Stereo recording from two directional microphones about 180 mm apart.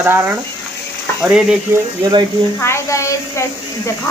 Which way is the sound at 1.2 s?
5° right (ahead or behind).